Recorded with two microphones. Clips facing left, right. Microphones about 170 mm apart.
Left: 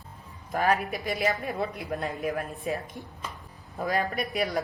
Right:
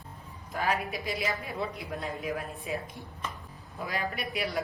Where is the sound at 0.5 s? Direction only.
50° left (ahead or behind).